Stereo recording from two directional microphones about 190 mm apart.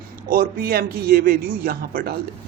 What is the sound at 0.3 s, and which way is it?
Speech, 50° right (ahead or behind).